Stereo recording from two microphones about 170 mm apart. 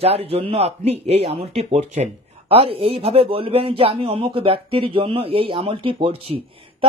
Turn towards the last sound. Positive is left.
turn(degrees=-30)  # may be behind; listen again after turning